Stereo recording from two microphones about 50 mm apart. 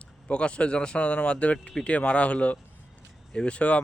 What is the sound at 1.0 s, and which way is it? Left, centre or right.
Speech, left.